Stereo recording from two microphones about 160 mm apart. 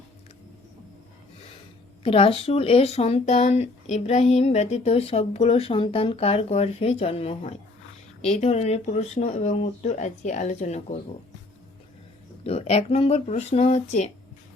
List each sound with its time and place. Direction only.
2.0 s speech: 35° left (ahead or behind)
12.5 s speech: 40° left (ahead or behind)